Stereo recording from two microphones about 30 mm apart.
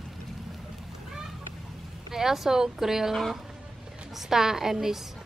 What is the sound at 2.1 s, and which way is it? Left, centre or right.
Speech, centre.